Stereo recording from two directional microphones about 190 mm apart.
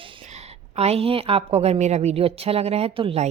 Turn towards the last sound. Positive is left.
turn(degrees=-30)  # may be behind; listen again after turning